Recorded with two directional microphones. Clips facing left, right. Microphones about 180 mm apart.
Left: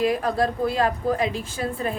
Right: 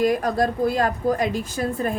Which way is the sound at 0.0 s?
45° right (ahead or behind).